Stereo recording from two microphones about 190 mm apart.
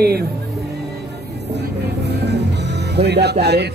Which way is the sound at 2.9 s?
60° right (ahead or behind).